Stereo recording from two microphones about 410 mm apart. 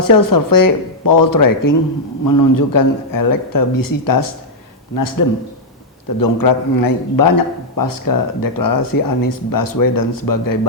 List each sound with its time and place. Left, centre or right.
0.0 s a man's voice: left